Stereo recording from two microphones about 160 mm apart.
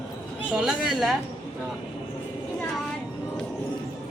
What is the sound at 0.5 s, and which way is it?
Speech, 5° right (ahead or behind).